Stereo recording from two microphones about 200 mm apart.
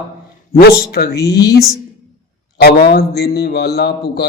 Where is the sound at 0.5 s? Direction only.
50° left (ahead or behind).